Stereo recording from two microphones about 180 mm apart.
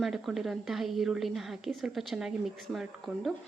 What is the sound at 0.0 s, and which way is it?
Speech, centre (ahead or behind).